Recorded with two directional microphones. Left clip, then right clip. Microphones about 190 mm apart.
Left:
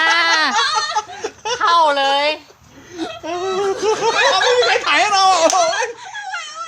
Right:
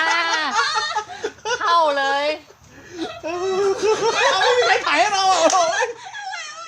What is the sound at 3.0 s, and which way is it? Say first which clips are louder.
Baby cry: left 2 dB; 30° left (ahead or behind).